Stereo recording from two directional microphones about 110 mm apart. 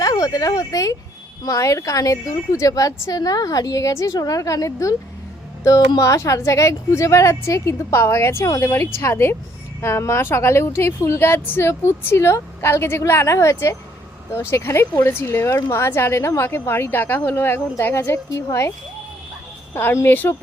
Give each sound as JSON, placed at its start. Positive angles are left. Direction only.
{"t": 0.0, "sound": "a woman's voice", "side_deg": 30}
{"t": 19.7, "sound": "a woman's voice", "side_deg": 25}